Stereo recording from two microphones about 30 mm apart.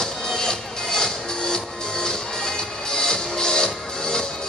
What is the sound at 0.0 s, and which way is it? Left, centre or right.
Music, centre.